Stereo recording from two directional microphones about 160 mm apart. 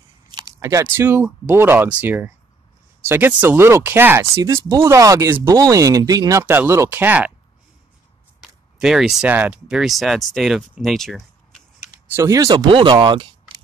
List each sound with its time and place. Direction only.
0.3 s speech: 25° right (ahead or behind)
6.4 s speech: 10° right (ahead or behind)
8.4 s a sound: centre (ahead or behind)
9.2 s speech: 10° right (ahead or behind)
11.8 s speech: 20° right (ahead or behind)